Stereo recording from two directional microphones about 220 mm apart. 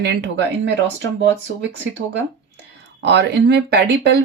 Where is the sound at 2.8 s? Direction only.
50° right (ahead or behind).